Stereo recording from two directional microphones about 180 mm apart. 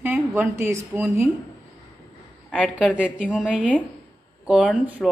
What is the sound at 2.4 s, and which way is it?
A woman's voice, centre (ahead or behind).